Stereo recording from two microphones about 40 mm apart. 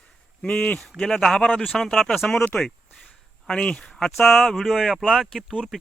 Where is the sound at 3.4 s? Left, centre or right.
Centre.